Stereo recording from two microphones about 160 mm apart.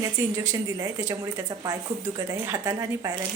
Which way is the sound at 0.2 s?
15° right (ahead or behind).